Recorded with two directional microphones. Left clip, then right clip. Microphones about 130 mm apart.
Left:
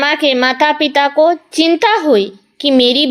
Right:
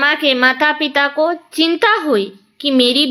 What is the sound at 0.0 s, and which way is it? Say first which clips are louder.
A child's voice: left 1 dB; 35° left (ahead or behind).